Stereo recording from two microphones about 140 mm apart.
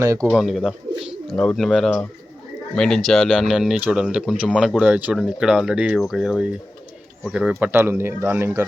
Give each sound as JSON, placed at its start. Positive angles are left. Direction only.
{"t": 0.0, "sound": "speech", "side_deg": -20}
{"t": 0.3, "sound": "speech", "side_deg": 0}